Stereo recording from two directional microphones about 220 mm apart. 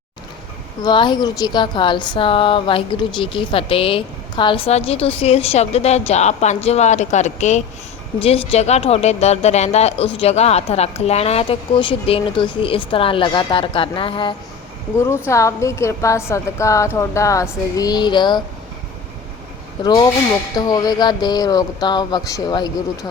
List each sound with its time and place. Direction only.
0.8 s a woman's voice: 20° left (ahead or behind)
19.8 s a woman's voice: 20° left (ahead or behind)